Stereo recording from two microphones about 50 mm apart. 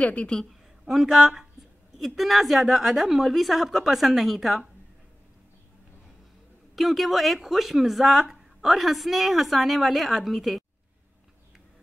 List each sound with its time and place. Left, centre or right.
0.0 s a woman's voice: left
0.5 s speech: centre
6.7 s speech: centre